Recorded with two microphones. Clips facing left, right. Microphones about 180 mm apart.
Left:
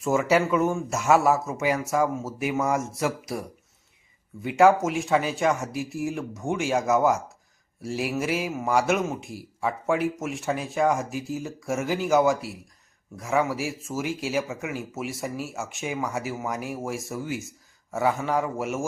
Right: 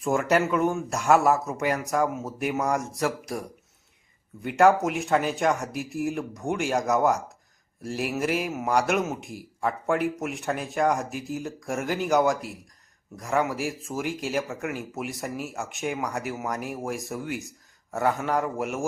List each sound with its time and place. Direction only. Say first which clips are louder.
0.0 s a man's voice: left 1 dB; centre (ahead or behind)
4.4 s a man's voice: left 1 dB; centre (ahead or behind)